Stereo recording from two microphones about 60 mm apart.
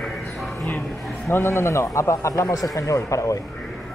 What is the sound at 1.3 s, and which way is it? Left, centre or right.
A man's voice, left.